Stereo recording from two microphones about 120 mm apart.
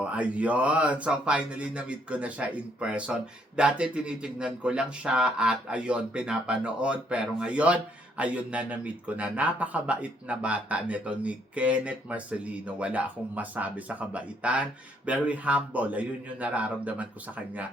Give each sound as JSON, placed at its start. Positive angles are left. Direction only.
{"t": 0.0, "sound": "speech", "side_deg": -10}